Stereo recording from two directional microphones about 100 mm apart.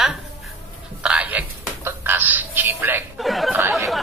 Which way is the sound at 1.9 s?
20° right (ahead or behind).